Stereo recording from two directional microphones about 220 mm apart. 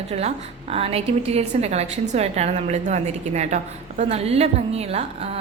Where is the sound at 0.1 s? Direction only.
30° right (ahead or behind).